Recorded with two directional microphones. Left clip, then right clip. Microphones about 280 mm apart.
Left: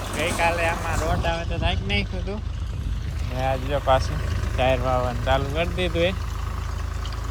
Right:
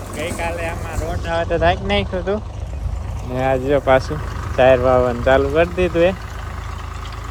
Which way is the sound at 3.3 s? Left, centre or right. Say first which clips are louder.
Right 8 dB; centre.